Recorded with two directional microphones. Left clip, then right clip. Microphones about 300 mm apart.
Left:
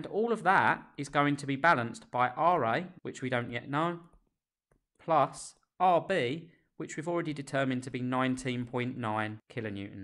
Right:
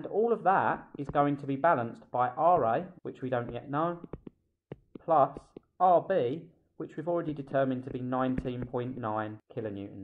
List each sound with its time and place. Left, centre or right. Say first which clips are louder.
0.0 s speech: right 2 dB; left
5.0 s speech: right 2 dB; left